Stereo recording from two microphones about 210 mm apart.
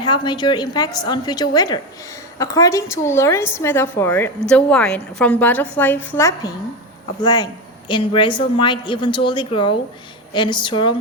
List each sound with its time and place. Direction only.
0.0 s a woman's voice: 20° left (ahead or behind)